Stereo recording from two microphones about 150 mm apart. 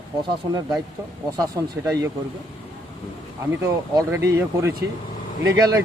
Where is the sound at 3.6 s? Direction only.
20° right (ahead or behind).